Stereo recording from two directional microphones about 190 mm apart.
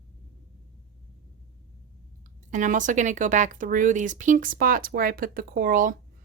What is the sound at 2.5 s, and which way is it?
A woman's voice, 40° right (ahead or behind).